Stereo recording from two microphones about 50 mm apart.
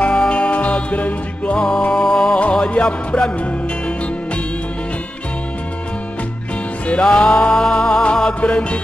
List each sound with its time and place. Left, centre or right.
0.0 s music: left
1.9 s music: centre
2.5 s music: left
6.9 s music: left